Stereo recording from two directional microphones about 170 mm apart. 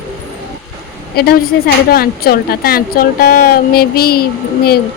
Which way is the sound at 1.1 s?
70° left (ahead or behind).